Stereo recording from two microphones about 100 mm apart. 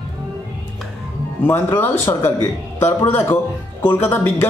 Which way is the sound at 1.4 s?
20° left (ahead or behind).